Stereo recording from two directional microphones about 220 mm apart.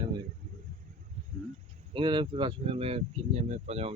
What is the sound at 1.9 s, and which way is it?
Speech, 20° right (ahead or behind).